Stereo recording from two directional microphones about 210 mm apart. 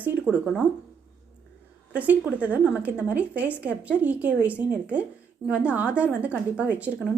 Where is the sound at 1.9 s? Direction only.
5° right (ahead or behind).